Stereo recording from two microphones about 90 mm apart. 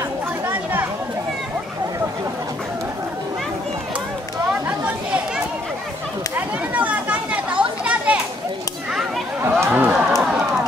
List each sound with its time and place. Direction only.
0.5 s chatter: 20° right (ahead or behind)
4.5 s chatter: 15° right (ahead or behind)
6.3 s children playing: 15° right (ahead or behind)
9.4 s a sound: 25° right (ahead or behind)
10.1 s music: 5° right (ahead or behind)